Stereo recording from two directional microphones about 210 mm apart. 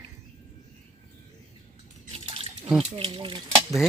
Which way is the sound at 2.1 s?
30° right (ahead or behind).